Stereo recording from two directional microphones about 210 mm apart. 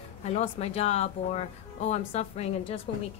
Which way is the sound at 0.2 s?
30° left (ahead or behind).